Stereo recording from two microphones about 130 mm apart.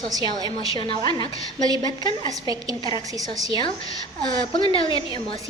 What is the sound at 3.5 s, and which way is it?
Speech, 40° left (ahead or behind).